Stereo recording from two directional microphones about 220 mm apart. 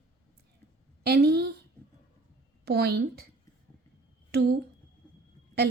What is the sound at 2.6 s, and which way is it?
Speech, 45° right (ahead or behind).